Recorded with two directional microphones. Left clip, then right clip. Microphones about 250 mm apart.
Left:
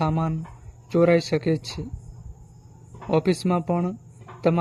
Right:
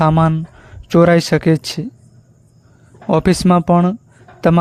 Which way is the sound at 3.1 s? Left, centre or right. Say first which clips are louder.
Right 9 dB; right.